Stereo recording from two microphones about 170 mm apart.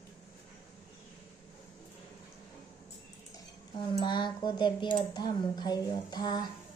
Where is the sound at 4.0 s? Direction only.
25° left (ahead or behind).